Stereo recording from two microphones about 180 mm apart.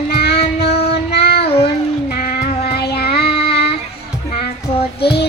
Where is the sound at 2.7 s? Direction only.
65° left (ahead or behind).